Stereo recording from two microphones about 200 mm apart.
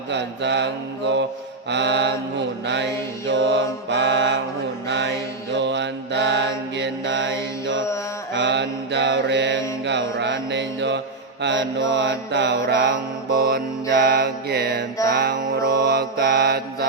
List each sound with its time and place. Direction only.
0.1 s mantra: 60° right (ahead or behind)
3.2 s mantra: 65° right (ahead or behind)